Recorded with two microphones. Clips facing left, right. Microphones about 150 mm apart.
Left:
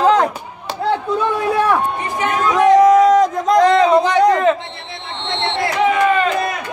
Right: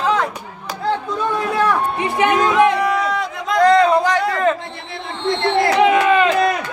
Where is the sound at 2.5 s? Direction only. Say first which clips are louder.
Left 5 dB; 40° left (ahead or behind).